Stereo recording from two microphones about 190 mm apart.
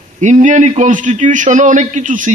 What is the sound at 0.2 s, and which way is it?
A man's voice, 40° right (ahead or behind).